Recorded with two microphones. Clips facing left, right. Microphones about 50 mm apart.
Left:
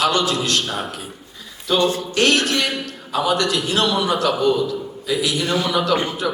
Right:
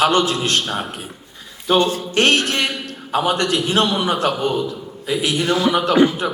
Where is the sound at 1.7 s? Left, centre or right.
Right.